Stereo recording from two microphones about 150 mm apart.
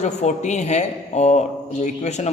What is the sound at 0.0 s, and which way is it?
A man's voice, 50° left (ahead or behind).